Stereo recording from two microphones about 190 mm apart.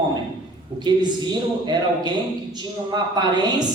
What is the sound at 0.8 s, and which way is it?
A man's voice, 25° right (ahead or behind).